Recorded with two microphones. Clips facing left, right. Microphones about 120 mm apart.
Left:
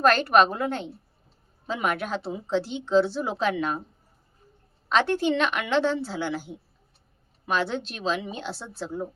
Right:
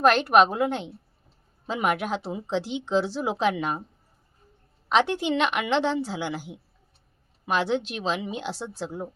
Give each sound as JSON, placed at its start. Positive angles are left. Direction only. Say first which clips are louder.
{"t": 0.0, "sound": "a woman's voice", "louder": "right 1 dB", "side_deg": -10}
{"t": 4.9, "sound": "a woman's voice", "louder": "even", "side_deg": -15}